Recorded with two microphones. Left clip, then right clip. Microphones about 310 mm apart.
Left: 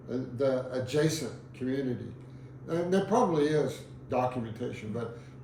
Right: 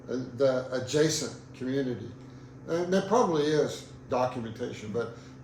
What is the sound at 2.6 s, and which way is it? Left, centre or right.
A man's voice, centre.